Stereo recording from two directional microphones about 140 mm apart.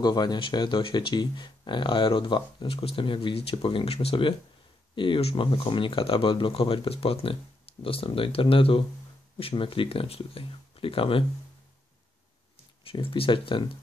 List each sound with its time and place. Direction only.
0.0 s speech: 30° left (ahead or behind)
12.8 s speech: 40° left (ahead or behind)